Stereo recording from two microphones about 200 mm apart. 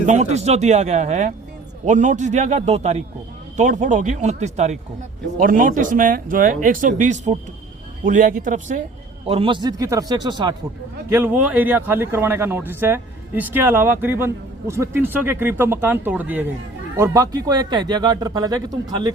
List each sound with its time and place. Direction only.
0.0 s speech: 35° right (ahead or behind)
9.2 s speech: 25° right (ahead or behind)
11.1 s speech: 10° right (ahead or behind)